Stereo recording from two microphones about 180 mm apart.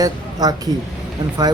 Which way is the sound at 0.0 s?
20° right (ahead or behind).